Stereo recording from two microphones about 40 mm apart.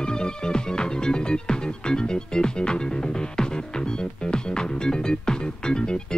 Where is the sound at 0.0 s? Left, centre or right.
Left.